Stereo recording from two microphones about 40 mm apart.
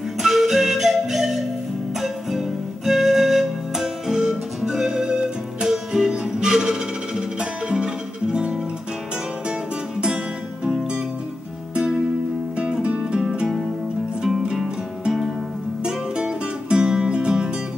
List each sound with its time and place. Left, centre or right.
0.2 s flute: centre
2.0 s music: centre; by 8.5 s right
11.7 s music: centre
13.2 s music: centre